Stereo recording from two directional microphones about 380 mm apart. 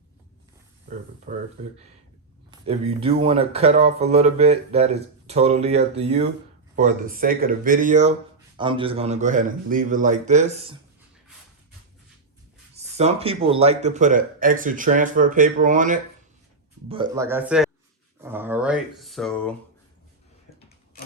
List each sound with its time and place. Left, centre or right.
1.3 s speech: right
2.5 s speech: centre
12.7 s speech: centre
18.2 s a sound: centre